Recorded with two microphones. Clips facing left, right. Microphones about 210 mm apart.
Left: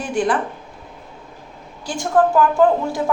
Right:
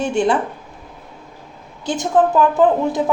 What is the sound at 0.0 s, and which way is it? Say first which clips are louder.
Speech: right 3 dB; 25° right (ahead or behind).